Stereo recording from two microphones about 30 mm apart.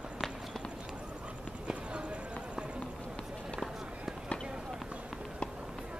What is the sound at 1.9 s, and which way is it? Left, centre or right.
Clip-clop, right.